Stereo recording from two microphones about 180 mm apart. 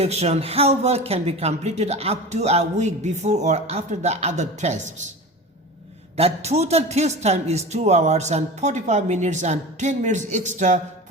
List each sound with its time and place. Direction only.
0.0 s speech: 35° right (ahead or behind)
6.1 s speech: 35° right (ahead or behind)